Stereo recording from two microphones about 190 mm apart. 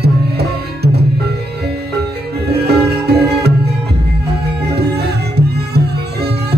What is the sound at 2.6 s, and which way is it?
Music, 55° right (ahead or behind).